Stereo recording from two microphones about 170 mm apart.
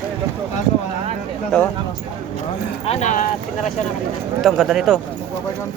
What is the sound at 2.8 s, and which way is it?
Speech, 40° left (ahead or behind).